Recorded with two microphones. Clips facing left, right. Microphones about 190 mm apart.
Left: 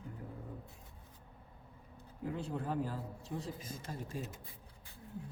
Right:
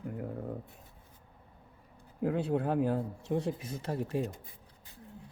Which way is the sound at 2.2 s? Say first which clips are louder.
Right 9 dB; 70° right (ahead or behind).